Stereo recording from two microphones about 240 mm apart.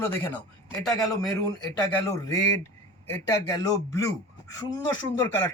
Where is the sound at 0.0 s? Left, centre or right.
Centre.